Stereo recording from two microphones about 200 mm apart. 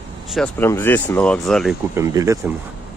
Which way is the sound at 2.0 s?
15° right (ahead or behind).